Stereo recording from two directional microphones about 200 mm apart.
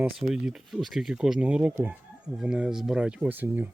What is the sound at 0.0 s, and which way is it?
Speech, 5° right (ahead or behind).